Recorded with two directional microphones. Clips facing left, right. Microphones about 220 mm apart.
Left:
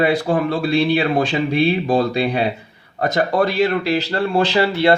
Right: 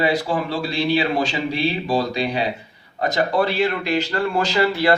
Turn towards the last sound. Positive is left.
turn(degrees=30)  # may be behind; listen again after turning